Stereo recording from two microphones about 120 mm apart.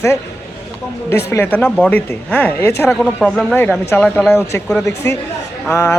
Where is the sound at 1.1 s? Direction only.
20° left (ahead or behind).